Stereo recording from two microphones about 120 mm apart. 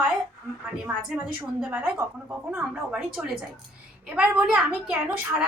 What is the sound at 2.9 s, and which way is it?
A woman's voice, 5° right (ahead or behind).